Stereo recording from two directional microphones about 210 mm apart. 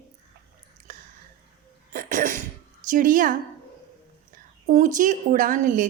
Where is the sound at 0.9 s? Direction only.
40° right (ahead or behind).